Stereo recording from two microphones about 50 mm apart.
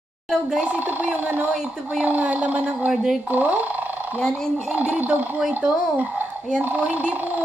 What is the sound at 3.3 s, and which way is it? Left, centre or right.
Speech, right.